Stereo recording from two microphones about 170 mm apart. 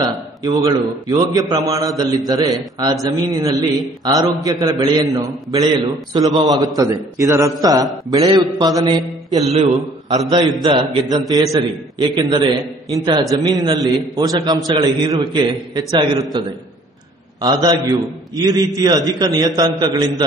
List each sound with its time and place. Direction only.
0.0 s a man's voice: 20° right (ahead or behind)
9.4 s a man's voice: 40° right (ahead or behind)
9.7 s a man's voice: 20° right (ahead or behind)
17.4 s a man's voice: 20° right (ahead or behind)